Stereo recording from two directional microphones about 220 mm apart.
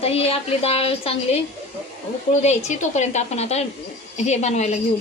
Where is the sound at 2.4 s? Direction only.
30° left (ahead or behind).